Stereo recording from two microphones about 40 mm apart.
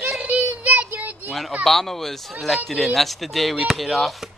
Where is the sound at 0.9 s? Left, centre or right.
Right.